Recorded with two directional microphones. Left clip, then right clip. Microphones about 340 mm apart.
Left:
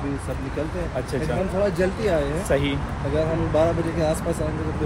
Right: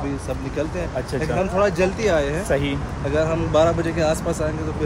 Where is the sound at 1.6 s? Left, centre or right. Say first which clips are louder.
Right 3 dB; centre.